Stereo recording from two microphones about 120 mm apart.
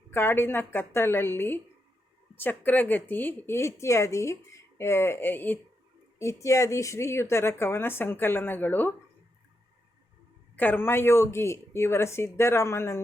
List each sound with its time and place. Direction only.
0.1 s speech: 20° left (ahead or behind)
10.5 s speech: 15° left (ahead or behind)